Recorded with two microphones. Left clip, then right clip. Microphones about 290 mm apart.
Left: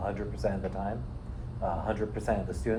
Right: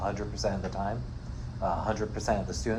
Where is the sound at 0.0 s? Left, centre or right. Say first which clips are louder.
Right 1 dB; right.